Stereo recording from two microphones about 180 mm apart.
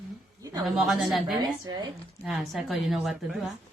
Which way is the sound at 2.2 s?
Centre (ahead or behind).